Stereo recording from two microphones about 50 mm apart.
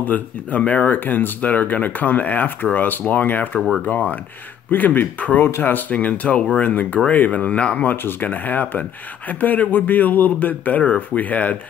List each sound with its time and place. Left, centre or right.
0.0 s speech: left
7.9 s speech: left